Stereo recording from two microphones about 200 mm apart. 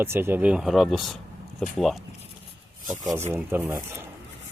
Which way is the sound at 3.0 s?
15° right (ahead or behind).